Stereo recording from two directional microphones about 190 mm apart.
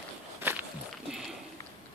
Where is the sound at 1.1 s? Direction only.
Centre (ahead or behind).